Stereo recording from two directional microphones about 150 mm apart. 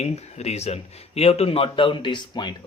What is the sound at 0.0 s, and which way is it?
Speech, 45° left (ahead or behind).